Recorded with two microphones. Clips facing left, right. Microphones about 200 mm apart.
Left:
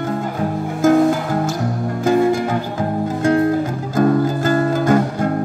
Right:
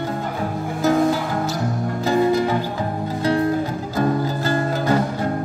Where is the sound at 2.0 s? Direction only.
50° left (ahead or behind).